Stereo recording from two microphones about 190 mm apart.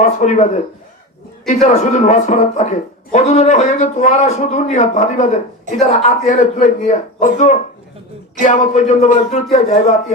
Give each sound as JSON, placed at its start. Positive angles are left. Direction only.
{"t": 0.0, "sound": "speech", "side_deg": 40}